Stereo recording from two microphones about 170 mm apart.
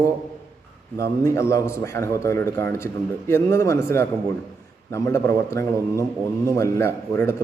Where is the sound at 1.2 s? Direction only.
15° left (ahead or behind).